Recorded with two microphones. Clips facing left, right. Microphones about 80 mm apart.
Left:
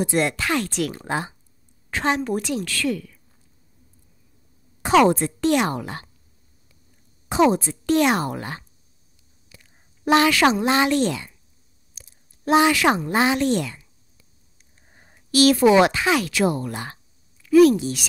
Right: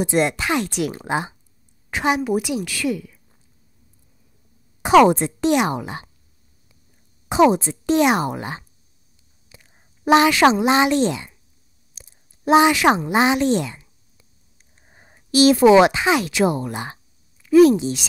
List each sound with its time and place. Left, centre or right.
0.0 s a woman's voice: centre
4.8 s a woman's voice: centre
7.2 s a woman's voice: centre
11.9 s a sound: right
14.9 s speech: centre